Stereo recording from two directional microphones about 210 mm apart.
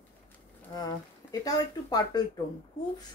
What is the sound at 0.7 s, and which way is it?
Speech, 20° left (ahead or behind).